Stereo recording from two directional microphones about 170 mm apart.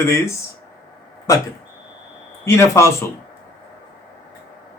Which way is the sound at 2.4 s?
15° left (ahead or behind).